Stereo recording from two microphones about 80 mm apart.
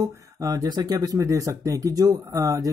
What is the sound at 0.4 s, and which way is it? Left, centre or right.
Speech, right.